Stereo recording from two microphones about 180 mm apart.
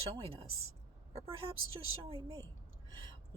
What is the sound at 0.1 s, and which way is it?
Speech, 30° right (ahead or behind).